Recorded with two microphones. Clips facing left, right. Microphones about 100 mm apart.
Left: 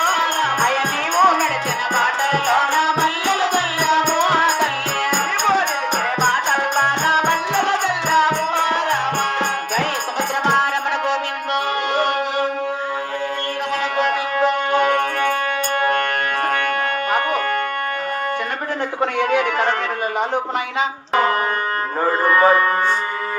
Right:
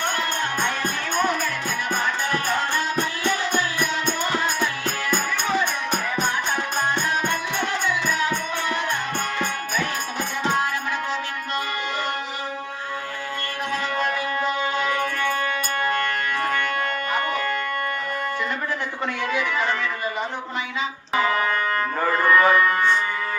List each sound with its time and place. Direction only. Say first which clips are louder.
0.0 s music: left 7 dB; 70° left (ahead or behind)
10.4 s music: left 5 dB; 70° left (ahead or behind)
14.0 s music: left 8 dB; 75° left (ahead or behind)
17.1 s music: left 6 dB; 60° left (ahead or behind)
19.2 s a sound: left 6 dB; 60° left (ahead or behind)
20.7 s music: left 5 dB; 55° left (ahead or behind)
22.0 s music: left 3 dB; 30° left (ahead or behind)